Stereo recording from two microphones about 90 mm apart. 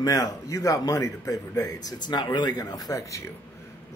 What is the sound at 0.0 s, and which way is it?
Speech, 40° left (ahead or behind).